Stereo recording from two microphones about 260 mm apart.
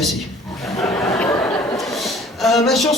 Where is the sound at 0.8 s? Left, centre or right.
Centre.